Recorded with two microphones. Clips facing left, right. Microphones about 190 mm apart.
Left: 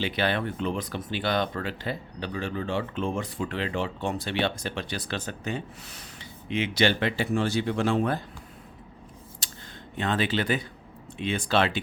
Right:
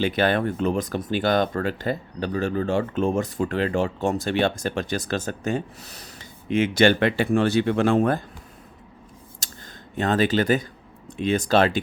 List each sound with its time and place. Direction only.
0.0 s speech: 45° right (ahead or behind)
9.4 s clicking: 45° right (ahead or behind)
10.0 s speech: 45° right (ahead or behind)